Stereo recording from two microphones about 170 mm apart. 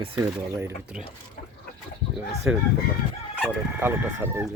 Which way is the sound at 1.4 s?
60° left (ahead or behind).